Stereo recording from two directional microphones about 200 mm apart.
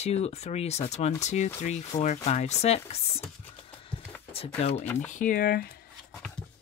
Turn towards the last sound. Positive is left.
turn(degrees=45)  # may be behind; listen again after turning